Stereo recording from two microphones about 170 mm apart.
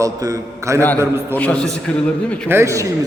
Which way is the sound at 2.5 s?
15° right (ahead or behind).